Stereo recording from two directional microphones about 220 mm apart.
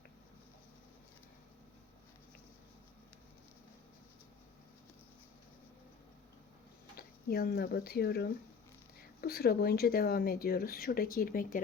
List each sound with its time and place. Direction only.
6.9 s speech: 45° left (ahead or behind)